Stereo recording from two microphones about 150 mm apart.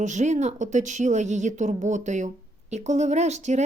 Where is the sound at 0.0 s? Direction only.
50° right (ahead or behind).